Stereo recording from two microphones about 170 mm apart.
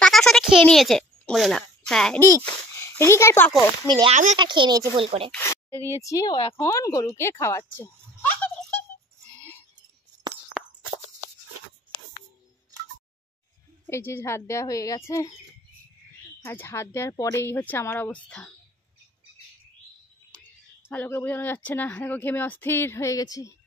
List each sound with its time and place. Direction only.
0.0 s a sound: 5° left (ahead or behind)
2.2 s a child's voice: 15° left (ahead or behind)
3.9 s a woman's voice: 30° right (ahead or behind)
5.4 s a sound: 15° left (ahead or behind)
5.9 s speech: 20° left (ahead or behind)
7.8 s a sound: 10° left (ahead or behind)
13.8 s speech: 15° left (ahead or behind)
16.4 s speech: 15° left (ahead or behind)
20.9 s speech: 10° left (ahead or behind)